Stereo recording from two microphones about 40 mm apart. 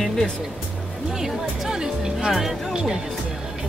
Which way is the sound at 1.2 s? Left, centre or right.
Centre.